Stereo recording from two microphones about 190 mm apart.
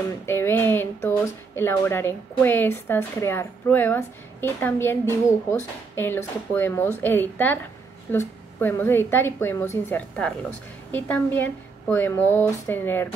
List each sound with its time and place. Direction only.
0.3 s speech: 10° left (ahead or behind)